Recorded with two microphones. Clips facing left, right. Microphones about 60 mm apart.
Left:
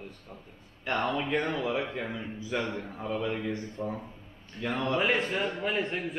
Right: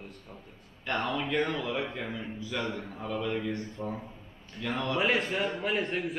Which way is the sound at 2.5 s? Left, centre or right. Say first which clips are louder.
Left 3 dB; left.